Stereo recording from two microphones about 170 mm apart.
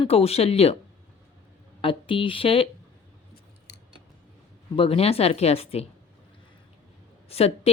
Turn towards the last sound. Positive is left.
turn(degrees=35)  # may be behind; listen again after turning